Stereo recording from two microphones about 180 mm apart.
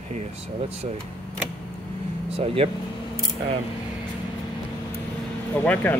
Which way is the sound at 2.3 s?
35° right (ahead or behind).